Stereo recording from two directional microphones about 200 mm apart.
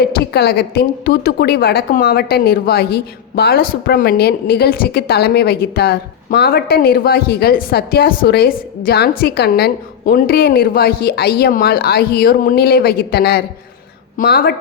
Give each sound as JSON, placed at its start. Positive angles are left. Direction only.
{"t": 0.0, "sound": "a woman's voice", "side_deg": 55}